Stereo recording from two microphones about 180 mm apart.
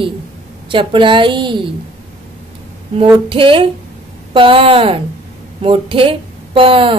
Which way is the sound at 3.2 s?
30° right (ahead or behind).